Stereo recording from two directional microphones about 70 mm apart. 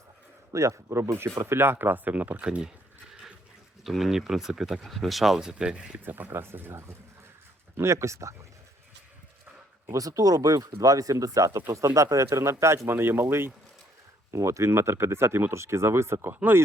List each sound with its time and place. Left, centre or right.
0.5 s speech: right; by 2.6 s centre
3.8 s speech: centre; by 8.4 s right
9.9 s speech: right
16.3 s speech: right